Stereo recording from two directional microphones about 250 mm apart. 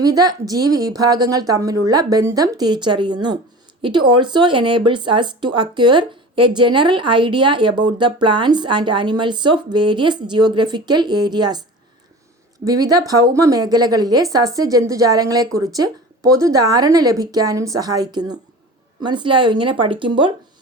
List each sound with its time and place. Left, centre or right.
0.0 s a woman's voice: centre
12.6 s a woman's voice: centre